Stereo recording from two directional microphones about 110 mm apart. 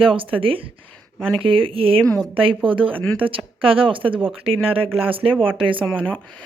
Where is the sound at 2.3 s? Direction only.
55° right (ahead or behind).